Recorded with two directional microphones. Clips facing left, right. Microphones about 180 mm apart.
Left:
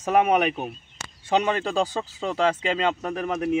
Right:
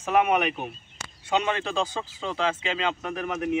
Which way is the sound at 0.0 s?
35° left (ahead or behind).